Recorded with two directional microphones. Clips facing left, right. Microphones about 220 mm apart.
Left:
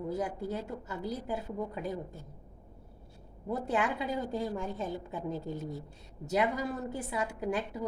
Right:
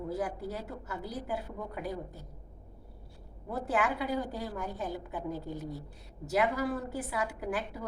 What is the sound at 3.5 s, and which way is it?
A woman's voice, 20° left (ahead or behind).